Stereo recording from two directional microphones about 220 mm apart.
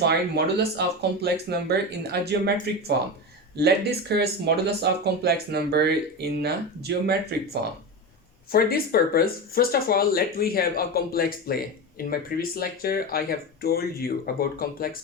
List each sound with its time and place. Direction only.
0.0 s speech: 50° right (ahead or behind)
3.6 s speech: 50° right (ahead or behind)
8.5 s speech: 45° left (ahead or behind)